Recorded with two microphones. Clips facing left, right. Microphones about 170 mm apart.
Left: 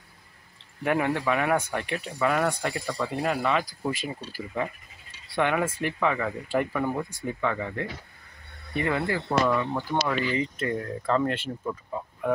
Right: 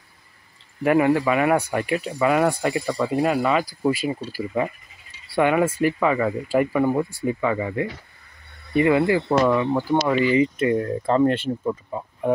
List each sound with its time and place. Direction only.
0.8 s speech: 5° right (ahead or behind)
10.8 s speech: 25° right (ahead or behind)